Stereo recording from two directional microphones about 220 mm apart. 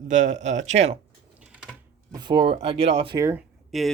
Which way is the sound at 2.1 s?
20° right (ahead or behind).